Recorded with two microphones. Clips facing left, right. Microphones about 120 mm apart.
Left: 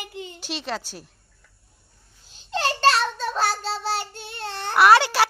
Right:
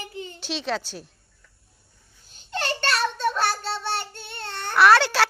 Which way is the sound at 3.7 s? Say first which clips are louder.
Left 2 dB; 90° left.